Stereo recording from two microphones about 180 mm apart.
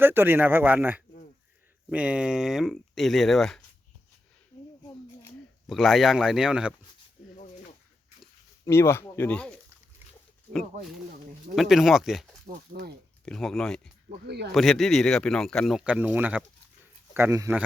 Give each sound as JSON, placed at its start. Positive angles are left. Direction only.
{"t": 0.0, "sound": "speech", "side_deg": -10}
{"t": 5.6, "sound": "speech", "side_deg": 0}
{"t": 8.6, "sound": "speech", "side_deg": 15}
{"t": 12.5, "sound": "speech", "side_deg": -60}
{"t": 13.2, "sound": "speech", "side_deg": 0}
{"t": 14.3, "sound": "speech", "side_deg": -65}
{"t": 14.5, "sound": "speech", "side_deg": 0}